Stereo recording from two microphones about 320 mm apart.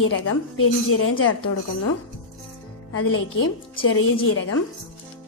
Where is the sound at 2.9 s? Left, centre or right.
Left.